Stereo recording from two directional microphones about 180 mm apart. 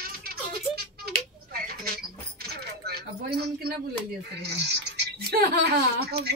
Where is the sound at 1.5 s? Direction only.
55° right (ahead or behind).